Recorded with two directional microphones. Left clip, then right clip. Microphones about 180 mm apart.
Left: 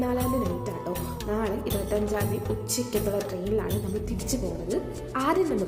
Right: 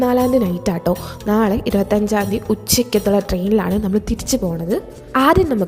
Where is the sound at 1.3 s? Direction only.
55° right (ahead or behind).